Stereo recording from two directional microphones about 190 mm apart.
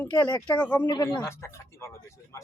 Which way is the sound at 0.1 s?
20° left (ahead or behind).